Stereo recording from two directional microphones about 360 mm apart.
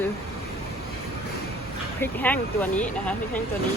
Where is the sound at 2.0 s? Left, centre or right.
Centre.